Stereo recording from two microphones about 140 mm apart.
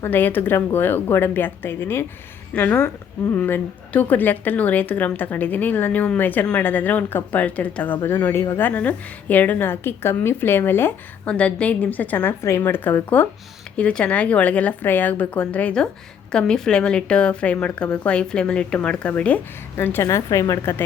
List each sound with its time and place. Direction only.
0.0 s a woman's voice: 15° left (ahead or behind)